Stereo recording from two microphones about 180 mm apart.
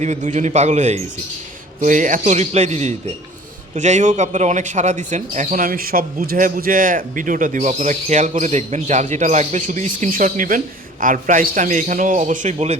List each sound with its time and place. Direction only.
0.0 s a man's voice: 40° right (ahead or behind)